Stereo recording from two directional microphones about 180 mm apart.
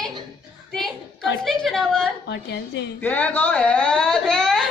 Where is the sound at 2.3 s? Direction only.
75° left (ahead or behind).